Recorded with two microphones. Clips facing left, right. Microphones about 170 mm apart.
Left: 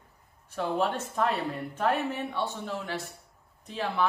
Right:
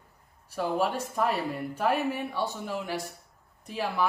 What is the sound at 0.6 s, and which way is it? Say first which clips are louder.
Speech: right 1 dB; 10° right (ahead or behind).